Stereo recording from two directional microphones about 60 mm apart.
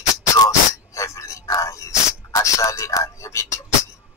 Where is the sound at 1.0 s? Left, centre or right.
Left.